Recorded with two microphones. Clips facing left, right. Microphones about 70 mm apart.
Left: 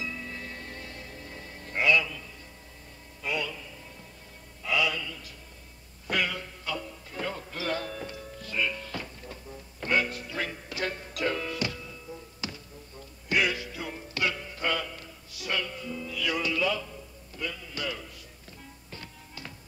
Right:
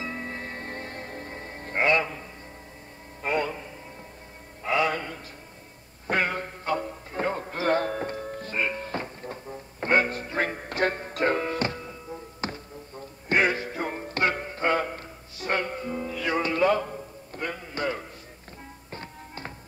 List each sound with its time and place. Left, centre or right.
0.0 s music: right
3.2 s a sound: right
4.6 s music: right